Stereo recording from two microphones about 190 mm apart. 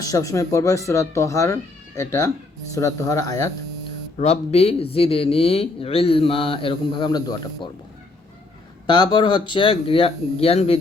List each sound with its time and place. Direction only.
0.0 s speech: 15° left (ahead or behind)
4.2 s speech: 35° left (ahead or behind)
8.9 s speech: 20° left (ahead or behind)